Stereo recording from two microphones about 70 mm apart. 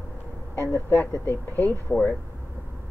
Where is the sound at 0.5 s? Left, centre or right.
Left.